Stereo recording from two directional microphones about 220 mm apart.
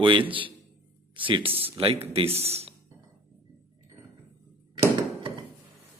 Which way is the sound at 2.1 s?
25° right (ahead or behind).